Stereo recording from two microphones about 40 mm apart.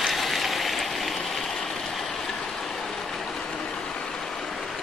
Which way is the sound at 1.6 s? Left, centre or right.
Centre.